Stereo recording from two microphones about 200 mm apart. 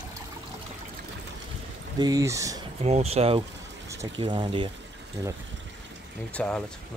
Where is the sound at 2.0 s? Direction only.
15° right (ahead or behind).